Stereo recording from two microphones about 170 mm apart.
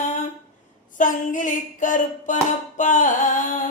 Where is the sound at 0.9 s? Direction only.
50° left (ahead or behind).